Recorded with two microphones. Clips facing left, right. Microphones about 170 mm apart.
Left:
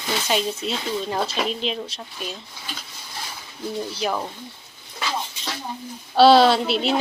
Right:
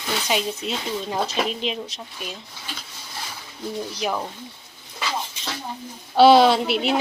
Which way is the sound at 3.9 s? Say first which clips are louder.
Even; 15° right (ahead or behind).